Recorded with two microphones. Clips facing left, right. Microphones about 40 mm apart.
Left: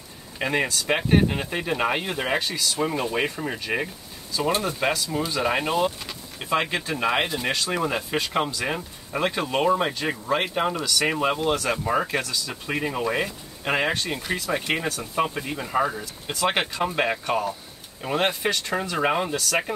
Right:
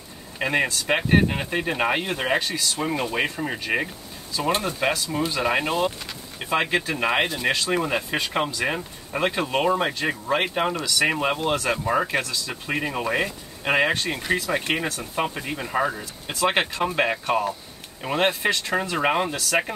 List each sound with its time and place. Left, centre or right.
0.4 s speech: centre